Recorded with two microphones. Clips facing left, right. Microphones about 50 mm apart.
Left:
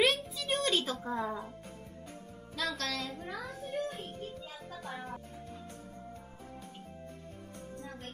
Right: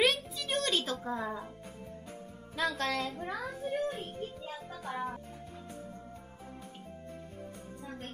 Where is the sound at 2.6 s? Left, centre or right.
Right.